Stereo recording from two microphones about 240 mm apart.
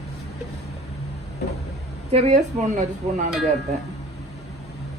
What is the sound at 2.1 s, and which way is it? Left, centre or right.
Speech, right.